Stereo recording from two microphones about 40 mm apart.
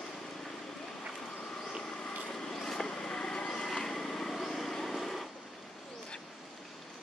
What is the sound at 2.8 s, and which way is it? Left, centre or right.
Vehicle, centre.